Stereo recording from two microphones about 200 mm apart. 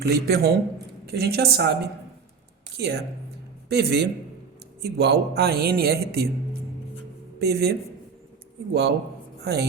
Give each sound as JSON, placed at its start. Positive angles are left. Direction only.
{"t": 0.1, "sound": "a man's voice", "side_deg": -55}
{"t": 2.7, "sound": "a man's voice", "side_deg": -55}
{"t": 7.3, "sound": "a man's voice", "side_deg": -55}
{"t": 8.7, "sound": "speech", "side_deg": -55}